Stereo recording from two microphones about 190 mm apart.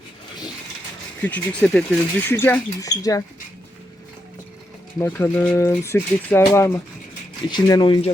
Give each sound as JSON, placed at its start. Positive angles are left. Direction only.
{"t": 1.2, "sound": "speech", "side_deg": 5}
{"t": 4.9, "sound": "speech", "side_deg": 10}